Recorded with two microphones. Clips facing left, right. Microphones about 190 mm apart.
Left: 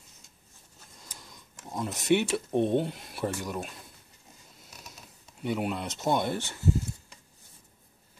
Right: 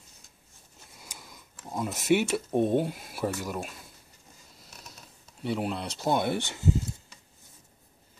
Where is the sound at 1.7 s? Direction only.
5° right (ahead or behind).